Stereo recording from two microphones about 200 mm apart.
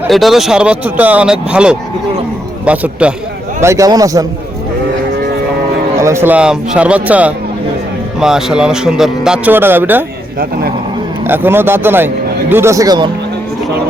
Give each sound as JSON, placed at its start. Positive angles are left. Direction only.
{"t": 0.1, "sound": "a man's voice", "side_deg": 0}
{"t": 6.0, "sound": "a man's voice", "side_deg": -15}
{"t": 11.3, "sound": "a man's voice", "side_deg": -10}